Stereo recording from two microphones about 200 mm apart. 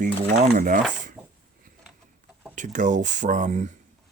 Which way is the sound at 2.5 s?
40° right (ahead or behind).